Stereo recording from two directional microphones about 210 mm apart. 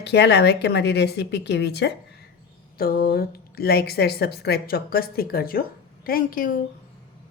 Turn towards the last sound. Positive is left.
turn(degrees=40)  # may be behind; listen again after turning